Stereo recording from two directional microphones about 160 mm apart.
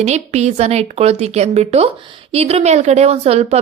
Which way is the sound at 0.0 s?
45° right (ahead or behind).